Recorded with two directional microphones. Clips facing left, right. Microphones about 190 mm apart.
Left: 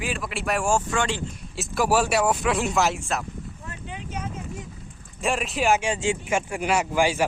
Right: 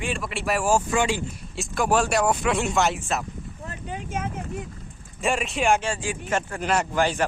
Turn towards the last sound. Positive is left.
turn(degrees=10)  # may be behind; listen again after turning